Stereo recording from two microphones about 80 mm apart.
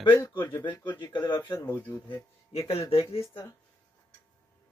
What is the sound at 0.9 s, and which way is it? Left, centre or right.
Speech, left.